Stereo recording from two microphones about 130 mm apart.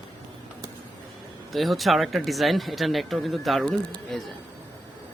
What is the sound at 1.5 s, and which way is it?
Speech, centre (ahead or behind).